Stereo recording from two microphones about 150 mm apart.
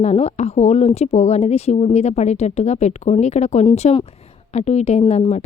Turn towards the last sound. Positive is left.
turn(degrees=45)  # may be behind; listen again after turning